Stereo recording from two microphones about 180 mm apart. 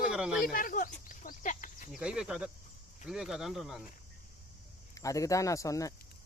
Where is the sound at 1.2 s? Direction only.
45° left (ahead or behind).